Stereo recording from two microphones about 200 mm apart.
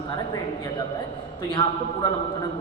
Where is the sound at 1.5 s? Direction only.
25° left (ahead or behind).